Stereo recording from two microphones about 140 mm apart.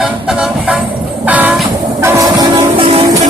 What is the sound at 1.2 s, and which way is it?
Train, 10° right (ahead or behind).